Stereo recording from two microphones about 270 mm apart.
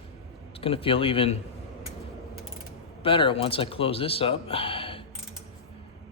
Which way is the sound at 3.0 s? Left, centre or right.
Centre.